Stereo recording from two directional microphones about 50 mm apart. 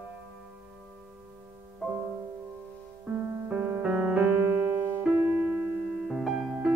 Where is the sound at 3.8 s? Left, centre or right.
Right.